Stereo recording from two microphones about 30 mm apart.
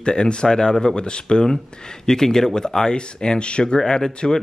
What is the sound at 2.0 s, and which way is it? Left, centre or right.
Speech, centre.